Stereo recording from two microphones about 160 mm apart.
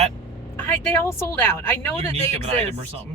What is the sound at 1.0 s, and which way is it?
Speech, 15° left (ahead or behind).